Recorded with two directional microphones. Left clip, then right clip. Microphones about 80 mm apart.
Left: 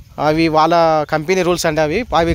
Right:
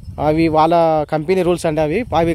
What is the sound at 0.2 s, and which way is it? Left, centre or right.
A man's voice, right.